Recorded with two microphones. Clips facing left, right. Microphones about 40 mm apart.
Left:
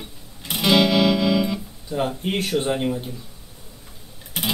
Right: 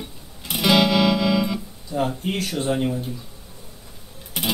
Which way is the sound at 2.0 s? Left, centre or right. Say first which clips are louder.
Even; left.